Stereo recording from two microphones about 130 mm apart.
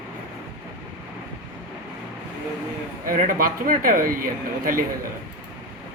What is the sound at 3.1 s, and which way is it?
Speech, 90° right.